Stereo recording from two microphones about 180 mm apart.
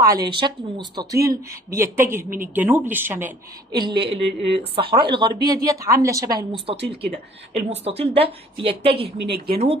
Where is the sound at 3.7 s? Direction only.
25° right (ahead or behind).